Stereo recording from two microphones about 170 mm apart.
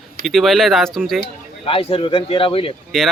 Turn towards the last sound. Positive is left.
turn(degrees=0)  # may be behind; listen again after turning